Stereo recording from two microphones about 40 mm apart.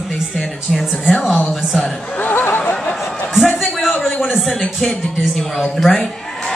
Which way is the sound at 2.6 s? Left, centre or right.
Left.